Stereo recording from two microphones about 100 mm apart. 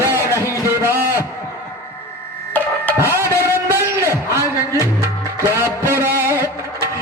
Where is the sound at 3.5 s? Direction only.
25° right (ahead or behind).